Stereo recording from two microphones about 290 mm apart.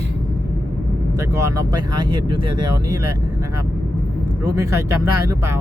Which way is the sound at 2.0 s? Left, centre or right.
Centre.